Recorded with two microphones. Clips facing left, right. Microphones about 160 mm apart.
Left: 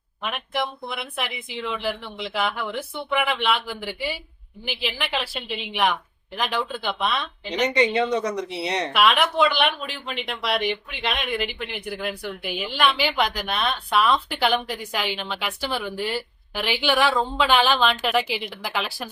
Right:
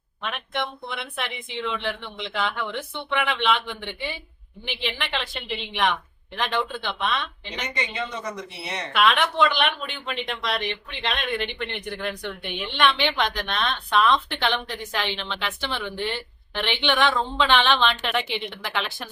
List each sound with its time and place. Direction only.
0.2 s speech: 5° left (ahead or behind)
7.7 s speech: 75° left (ahead or behind)
8.9 s speech: 5° left (ahead or behind)